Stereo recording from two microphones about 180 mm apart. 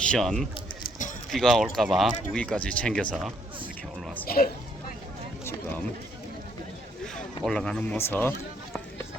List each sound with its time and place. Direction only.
0.0 s speech: 5° left (ahead or behind)
4.0 s a sound: 10° left (ahead or behind)
4.3 s speech: 55° left (ahead or behind)
7.4 s speech: 5° left (ahead or behind)